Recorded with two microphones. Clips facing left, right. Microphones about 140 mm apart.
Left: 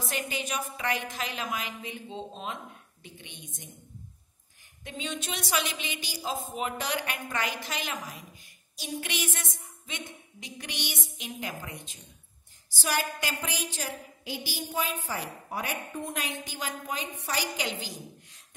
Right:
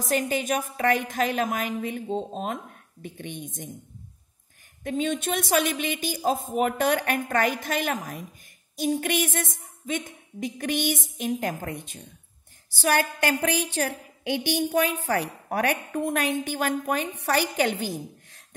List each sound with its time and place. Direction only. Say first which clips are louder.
0.0 s a woman's voice: right 8 dB; 45° right (ahead or behind)
4.8 s a woman's voice: right 10 dB; 50° right (ahead or behind)